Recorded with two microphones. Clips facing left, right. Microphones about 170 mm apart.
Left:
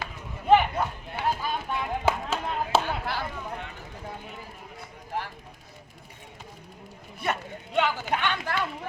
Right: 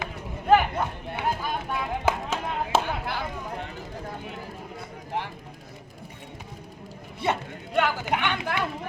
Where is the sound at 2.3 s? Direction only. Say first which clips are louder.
Even; 15° right (ahead or behind).